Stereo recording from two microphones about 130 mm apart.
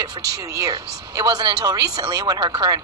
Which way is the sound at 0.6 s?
30° right (ahead or behind).